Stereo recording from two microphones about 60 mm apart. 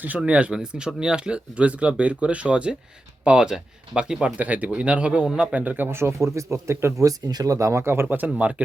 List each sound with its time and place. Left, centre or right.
0.3 s speech: right
7.0 s speech: right
8.4 s speech: right